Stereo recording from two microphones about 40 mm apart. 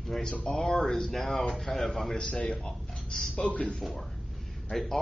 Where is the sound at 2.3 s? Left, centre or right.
Centre.